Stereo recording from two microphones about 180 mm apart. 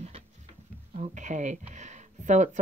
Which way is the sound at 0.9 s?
40° right (ahead or behind).